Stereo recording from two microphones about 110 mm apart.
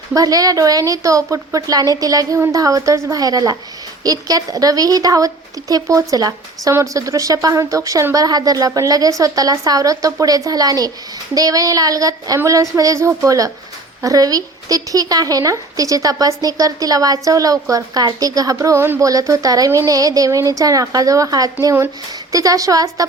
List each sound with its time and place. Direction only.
0.1 s a woman's voice: 35° right (ahead or behind)